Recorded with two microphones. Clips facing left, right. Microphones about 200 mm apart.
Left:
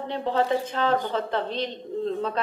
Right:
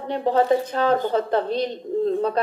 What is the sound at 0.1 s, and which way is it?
Mantra, 40° right (ahead or behind).